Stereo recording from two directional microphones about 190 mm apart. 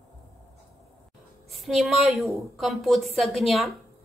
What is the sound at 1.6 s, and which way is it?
A woman's voice, centre (ahead or behind).